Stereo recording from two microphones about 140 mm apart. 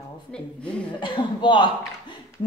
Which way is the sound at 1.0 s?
35° left (ahead or behind).